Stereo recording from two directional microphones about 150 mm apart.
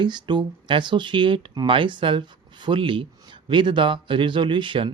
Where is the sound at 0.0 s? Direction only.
30° right (ahead or behind).